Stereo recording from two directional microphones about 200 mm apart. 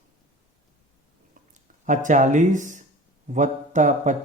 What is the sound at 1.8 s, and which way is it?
Speech, 40° right (ahead or behind).